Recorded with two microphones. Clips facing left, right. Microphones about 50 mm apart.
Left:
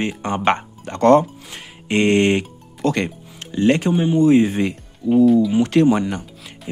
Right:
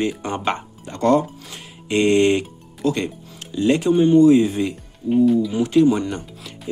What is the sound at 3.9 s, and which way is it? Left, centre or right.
Speech, centre.